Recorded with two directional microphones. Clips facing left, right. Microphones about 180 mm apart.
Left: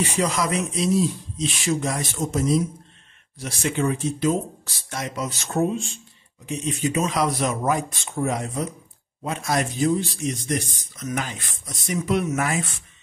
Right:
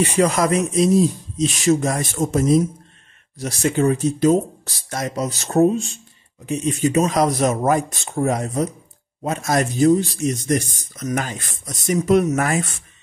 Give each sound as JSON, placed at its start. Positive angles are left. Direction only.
{"t": 0.0, "sound": "speech", "side_deg": -55}
{"t": 3.3, "sound": "speech", "side_deg": -40}